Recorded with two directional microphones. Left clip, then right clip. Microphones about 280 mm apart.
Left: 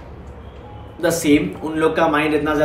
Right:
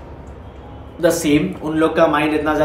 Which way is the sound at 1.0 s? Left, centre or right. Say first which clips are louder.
Right 1 dB; centre.